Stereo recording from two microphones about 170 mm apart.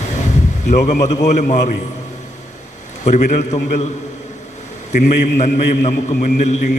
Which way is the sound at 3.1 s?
45° left (ahead or behind).